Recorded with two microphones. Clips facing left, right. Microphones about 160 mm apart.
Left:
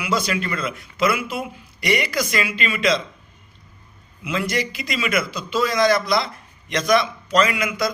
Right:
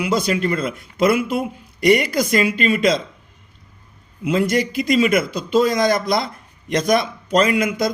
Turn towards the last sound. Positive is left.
turn(degrees=-50)  # may be behind; listen again after turning